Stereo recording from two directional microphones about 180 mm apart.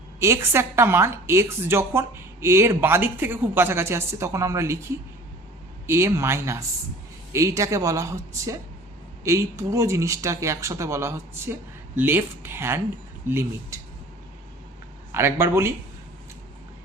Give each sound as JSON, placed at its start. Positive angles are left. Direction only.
{"t": 0.2, "sound": "a woman's voice", "side_deg": -15}
{"t": 15.1, "sound": "a woman's voice", "side_deg": -15}